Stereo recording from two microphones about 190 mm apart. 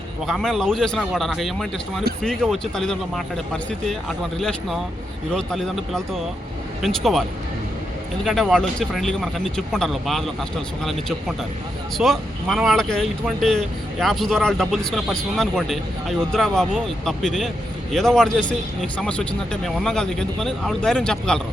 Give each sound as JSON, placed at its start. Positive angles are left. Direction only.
{"t": 0.3, "sound": "speech", "side_deg": 0}